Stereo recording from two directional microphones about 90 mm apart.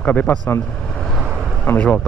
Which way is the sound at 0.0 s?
15° left (ahead or behind).